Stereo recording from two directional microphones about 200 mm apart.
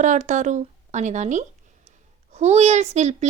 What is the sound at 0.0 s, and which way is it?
Speech, 40° right (ahead or behind).